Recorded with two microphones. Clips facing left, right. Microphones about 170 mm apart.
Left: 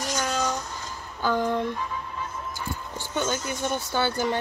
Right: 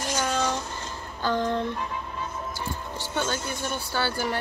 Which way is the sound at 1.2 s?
10° left (ahead or behind).